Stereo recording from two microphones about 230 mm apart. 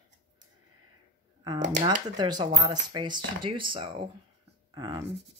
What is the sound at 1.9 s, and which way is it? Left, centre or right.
Speech, centre.